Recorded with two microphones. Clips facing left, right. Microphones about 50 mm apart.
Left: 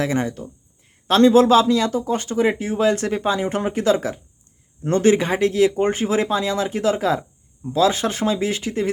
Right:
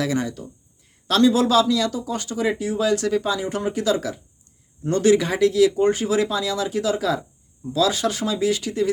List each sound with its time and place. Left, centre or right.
0.0 s speech: left